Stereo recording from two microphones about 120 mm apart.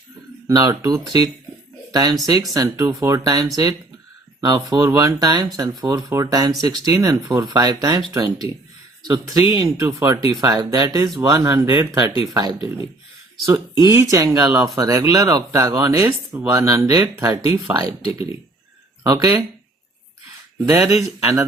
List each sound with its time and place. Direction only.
0.4 s speech: 25° right (ahead or behind)
9.0 s speech: 30° right (ahead or behind)
12.3 s speech: 35° right (ahead or behind)
13.7 s speech: 30° right (ahead or behind)
16.9 s speech: 35° right (ahead or behind)
20.7 s speech: 25° right (ahead or behind)